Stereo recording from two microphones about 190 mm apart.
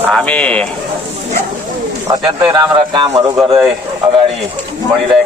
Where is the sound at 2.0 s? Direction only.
20° right (ahead or behind).